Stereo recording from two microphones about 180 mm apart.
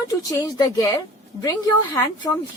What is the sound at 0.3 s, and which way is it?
A woman's voice, 20° left (ahead or behind).